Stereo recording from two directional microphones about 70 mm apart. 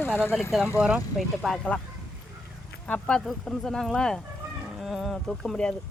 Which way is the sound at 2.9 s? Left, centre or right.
Centre.